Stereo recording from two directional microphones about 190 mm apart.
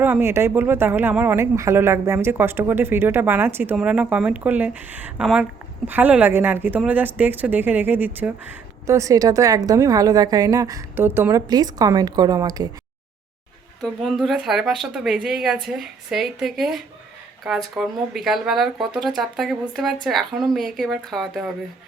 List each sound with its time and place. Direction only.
0.0 s speech: 10° right (ahead or behind)
13.8 s speech: centre (ahead or behind)